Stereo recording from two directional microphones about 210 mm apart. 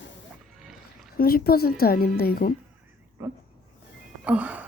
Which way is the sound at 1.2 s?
45° left (ahead or behind).